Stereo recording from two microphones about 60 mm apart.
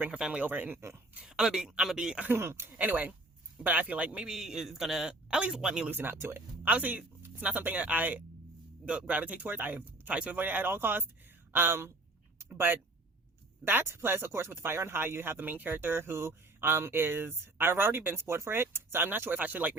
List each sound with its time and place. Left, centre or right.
0.1 s a man's voice: centre
0.4 s speech: right
0.8 s speech: right
1.2 s a man's voice: centre
2.3 s speech: right
2.7 s a man's voice: right
5.9 s speech: right
6.7 s speech: right
13.8 s speech: right
19.4 s speech: right